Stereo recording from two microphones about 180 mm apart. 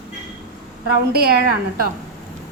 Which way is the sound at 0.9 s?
60° right (ahead or behind).